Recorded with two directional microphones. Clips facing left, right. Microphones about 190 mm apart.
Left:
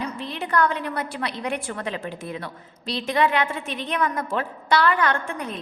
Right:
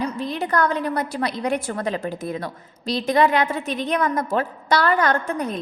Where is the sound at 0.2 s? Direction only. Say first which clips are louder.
Left 1 dB; 40° right (ahead or behind).